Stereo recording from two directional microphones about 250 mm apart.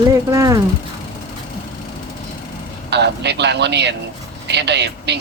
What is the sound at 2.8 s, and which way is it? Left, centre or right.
Speech, right.